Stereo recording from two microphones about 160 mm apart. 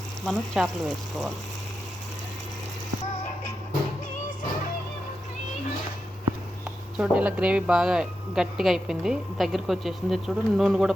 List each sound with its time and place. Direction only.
0.3 s speech: centre (ahead or behind)
6.9 s speech: 5° right (ahead or behind)